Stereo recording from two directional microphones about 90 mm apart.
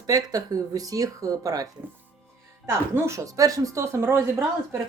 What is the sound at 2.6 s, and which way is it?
Speech, 30° right (ahead or behind).